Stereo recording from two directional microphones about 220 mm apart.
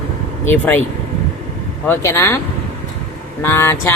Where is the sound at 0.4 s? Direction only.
10° left (ahead or behind).